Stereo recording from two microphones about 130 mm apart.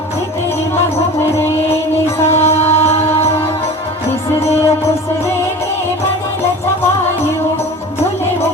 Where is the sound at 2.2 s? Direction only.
20° left (ahead or behind).